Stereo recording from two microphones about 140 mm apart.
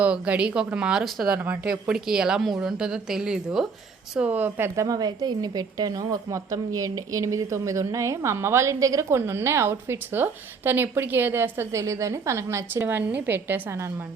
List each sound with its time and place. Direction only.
0.0 s a woman's voice: 10° right (ahead or behind)